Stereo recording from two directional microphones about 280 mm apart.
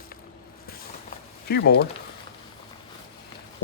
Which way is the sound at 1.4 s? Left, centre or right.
Left.